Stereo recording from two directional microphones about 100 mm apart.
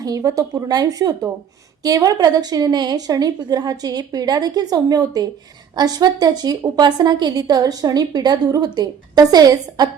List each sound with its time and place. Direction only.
0.0 s a woman's voice: 35° right (ahead or behind)